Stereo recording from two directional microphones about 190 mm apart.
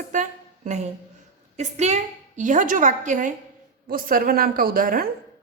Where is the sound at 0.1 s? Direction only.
40° right (ahead or behind).